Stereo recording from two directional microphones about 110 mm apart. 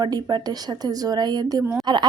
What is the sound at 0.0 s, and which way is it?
A woman's voice, 35° right (ahead or behind).